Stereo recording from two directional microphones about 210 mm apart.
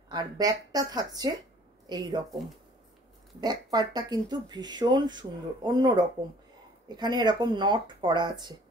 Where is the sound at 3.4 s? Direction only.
20° right (ahead or behind).